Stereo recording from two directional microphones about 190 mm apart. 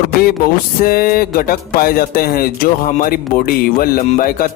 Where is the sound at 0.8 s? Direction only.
50° left (ahead or behind).